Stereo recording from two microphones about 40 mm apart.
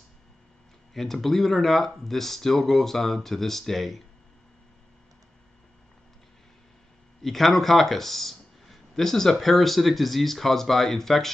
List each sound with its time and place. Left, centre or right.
0.9 s speech: centre
7.2 s speech: centre